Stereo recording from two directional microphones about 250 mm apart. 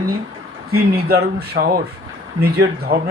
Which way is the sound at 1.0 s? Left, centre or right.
Right.